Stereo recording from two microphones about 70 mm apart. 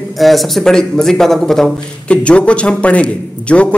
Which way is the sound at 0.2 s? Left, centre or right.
Centre.